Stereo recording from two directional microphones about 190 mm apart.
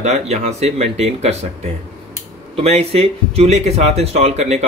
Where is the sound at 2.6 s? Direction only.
35° right (ahead or behind).